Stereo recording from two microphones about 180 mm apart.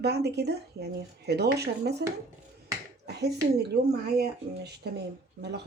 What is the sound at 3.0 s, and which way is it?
Speech, 65° right (ahead or behind).